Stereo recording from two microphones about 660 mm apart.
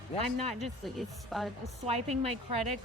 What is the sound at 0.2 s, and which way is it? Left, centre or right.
Speech, right.